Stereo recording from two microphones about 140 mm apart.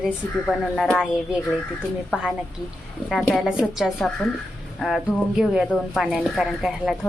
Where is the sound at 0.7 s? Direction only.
10° left (ahead or behind).